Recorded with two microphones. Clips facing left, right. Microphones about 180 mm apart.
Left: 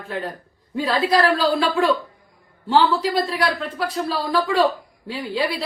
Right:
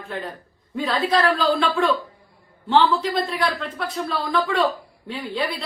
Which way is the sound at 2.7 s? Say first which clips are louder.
Left 1 dB; 35° left (ahead or behind).